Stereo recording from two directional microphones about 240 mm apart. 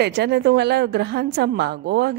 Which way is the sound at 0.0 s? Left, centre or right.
Right.